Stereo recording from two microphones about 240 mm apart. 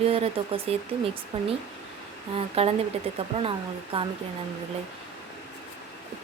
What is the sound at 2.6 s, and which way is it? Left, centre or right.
Speech, right.